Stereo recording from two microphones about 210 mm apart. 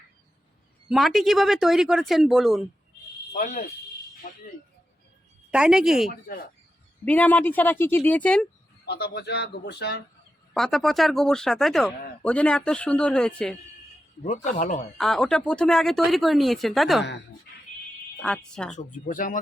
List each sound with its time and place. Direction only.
0.9 s speech: centre (ahead or behind)
3.3 s speech: 35° left (ahead or behind)
5.5 s speech: 5° right (ahead or behind)
6.2 s a man's voice: 45° left (ahead or behind)
7.0 s speech: 5° left (ahead or behind)
8.9 s a man's voice: 50° left (ahead or behind)
10.5 s speech: centre (ahead or behind)
14.2 s speech: 35° left (ahead or behind)
14.9 s speech: centre (ahead or behind)
17.5 s fire alarm: 45° left (ahead or behind)
18.2 s speech: 5° left (ahead or behind)
18.8 s speech: 35° left (ahead or behind)